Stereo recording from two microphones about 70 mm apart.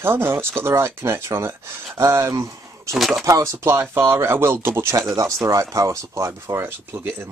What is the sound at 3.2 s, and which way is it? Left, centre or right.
Speech, right.